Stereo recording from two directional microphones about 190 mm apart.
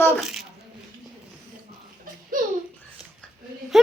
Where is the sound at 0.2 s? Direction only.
5° right (ahead or behind).